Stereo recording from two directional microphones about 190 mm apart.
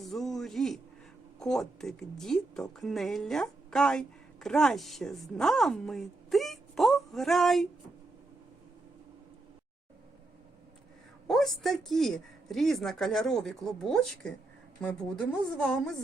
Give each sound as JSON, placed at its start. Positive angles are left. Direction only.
{"t": 0.0, "sound": "a sound", "side_deg": 0}
{"t": 1.4, "sound": "a woman's voice", "side_deg": 5}
{"t": 11.3, "sound": "a woman's voice", "side_deg": 0}